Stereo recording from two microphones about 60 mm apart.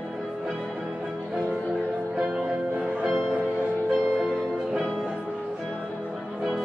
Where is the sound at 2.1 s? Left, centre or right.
Centre.